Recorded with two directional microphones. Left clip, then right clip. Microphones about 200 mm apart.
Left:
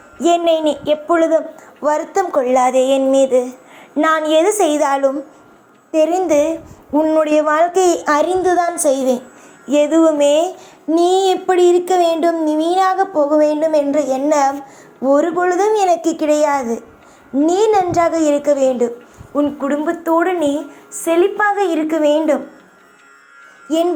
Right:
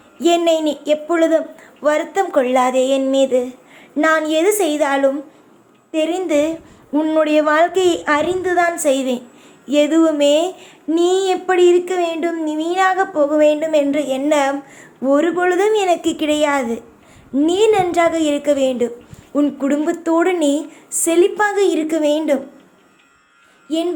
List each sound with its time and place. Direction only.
0.3 s a woman's voice: 5° right (ahead or behind)
2.1 s music: 10° right (ahead or behind)
4.0 s a woman's voice: 5° right (ahead or behind)
8.0 s speech: 10° left (ahead or behind)
9.7 s a woman's voice: 5° right (ahead or behind)
11.0 s a woman's voice: 5° left (ahead or behind)
13.0 s a child's voice: 20° right (ahead or behind)
13.4 s a woman's voice: centre (ahead or behind)
13.7 s a child's voice: 25° right (ahead or behind)